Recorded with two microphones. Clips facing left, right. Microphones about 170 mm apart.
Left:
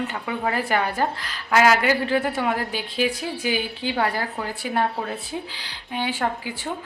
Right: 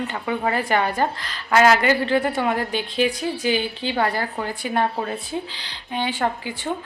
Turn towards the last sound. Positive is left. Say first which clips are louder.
# right 2 dB
turn(degrees=10)  # may be behind; listen again after turning